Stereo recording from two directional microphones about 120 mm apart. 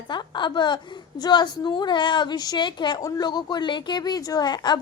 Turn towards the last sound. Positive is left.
turn(degrees=35)  # may be behind; listen again after turning